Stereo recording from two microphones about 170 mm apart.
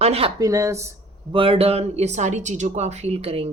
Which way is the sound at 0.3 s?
20° right (ahead or behind).